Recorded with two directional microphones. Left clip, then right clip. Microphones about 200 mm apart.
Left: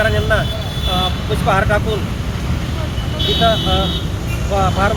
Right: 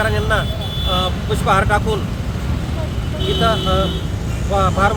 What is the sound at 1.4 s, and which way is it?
Speech, 15° right (ahead or behind).